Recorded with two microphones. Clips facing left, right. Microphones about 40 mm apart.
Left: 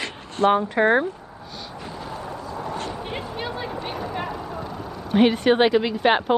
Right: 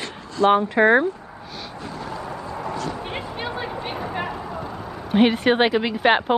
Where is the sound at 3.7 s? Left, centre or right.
Right.